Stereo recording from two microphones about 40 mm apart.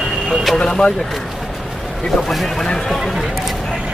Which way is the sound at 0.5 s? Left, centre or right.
Left.